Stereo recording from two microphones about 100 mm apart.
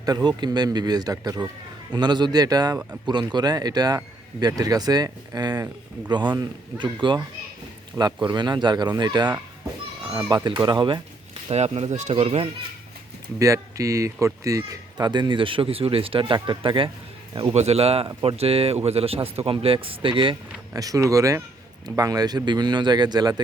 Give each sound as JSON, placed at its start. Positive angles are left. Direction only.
{"t": 0.0, "sound": "speech", "side_deg": -45}
{"t": 7.9, "sound": "speech", "side_deg": -45}
{"t": 10.0, "sound": "a child's voice", "side_deg": -10}
{"t": 10.2, "sound": "speech", "side_deg": -50}
{"t": 11.4, "sound": "speech", "side_deg": -90}
{"t": 13.4, "sound": "speech", "side_deg": -30}
{"t": 17.3, "sound": "speech", "side_deg": -75}
{"t": 18.2, "sound": "speech", "side_deg": -70}
{"t": 20.7, "sound": "speech", "side_deg": -35}